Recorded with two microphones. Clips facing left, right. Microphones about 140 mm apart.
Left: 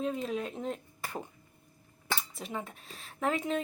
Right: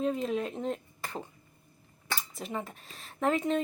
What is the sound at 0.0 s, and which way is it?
Speech, centre (ahead or behind).